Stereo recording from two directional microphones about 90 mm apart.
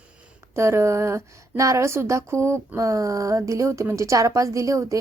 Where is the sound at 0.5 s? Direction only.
30° right (ahead or behind).